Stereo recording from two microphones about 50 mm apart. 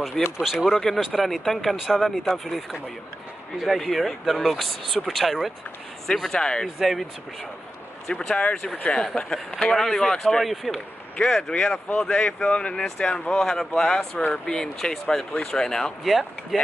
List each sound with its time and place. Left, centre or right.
0.2 s speech: centre
0.7 s speech: centre
6.4 s speech: centre
6.8 s speech: centre
8.1 s speech: centre
10.4 s speech: centre
11.1 s speech: centre
16.0 s speech: centre